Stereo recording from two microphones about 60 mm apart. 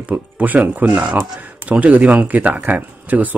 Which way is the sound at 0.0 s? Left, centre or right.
Right.